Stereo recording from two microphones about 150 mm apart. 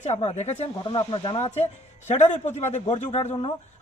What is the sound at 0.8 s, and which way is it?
A man's voice, 35° left (ahead or behind).